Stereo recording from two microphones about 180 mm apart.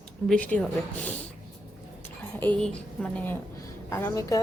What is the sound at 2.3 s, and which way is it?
A woman's voice, 10° left (ahead or behind).